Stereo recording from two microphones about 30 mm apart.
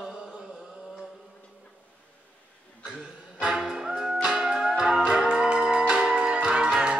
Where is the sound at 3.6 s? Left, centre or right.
Right.